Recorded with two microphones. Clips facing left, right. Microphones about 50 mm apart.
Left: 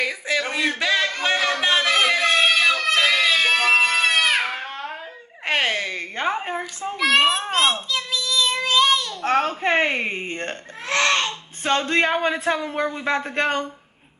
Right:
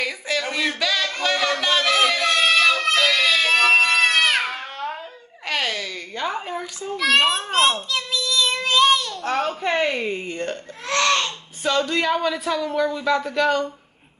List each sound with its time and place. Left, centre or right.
0.0 s speech: centre
1.2 s music: left
2.9 s a sound: left
3.8 s baby cry: left
5.4 s a sound: left
7.4 s babbling: left
9.2 s speech: left
10.9 s speech: left